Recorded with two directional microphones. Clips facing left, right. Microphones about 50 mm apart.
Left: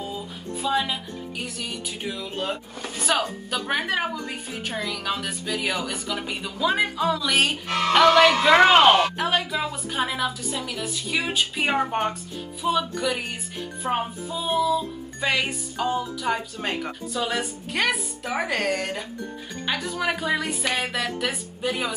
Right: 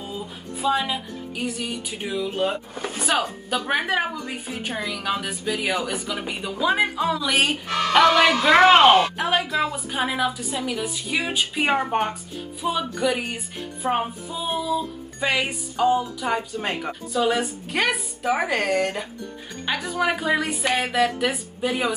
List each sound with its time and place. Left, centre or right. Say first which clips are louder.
0.6 s a woman's voice: right 2 dB; centre
2.7 s a sound: right 4 dB; right
3.0 s a woman's voice: even; centre